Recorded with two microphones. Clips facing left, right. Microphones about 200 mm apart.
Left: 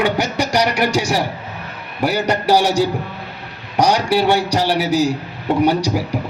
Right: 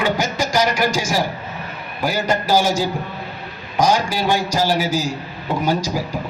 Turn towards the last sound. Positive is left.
turn(degrees=65)  # may be behind; listen again after turning